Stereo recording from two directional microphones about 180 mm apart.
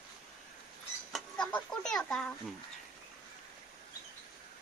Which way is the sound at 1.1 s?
5° left (ahead or behind).